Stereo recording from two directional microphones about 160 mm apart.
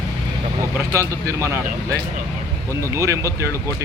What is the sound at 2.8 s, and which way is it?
Speech, 20° right (ahead or behind).